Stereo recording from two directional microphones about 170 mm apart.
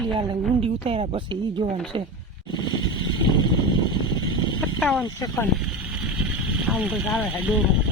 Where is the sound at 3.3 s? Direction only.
25° left (ahead or behind).